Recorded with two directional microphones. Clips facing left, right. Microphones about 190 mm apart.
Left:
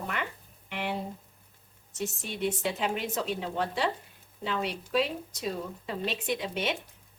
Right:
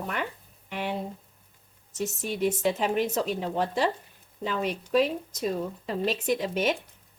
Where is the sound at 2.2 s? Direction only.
40° right (ahead or behind).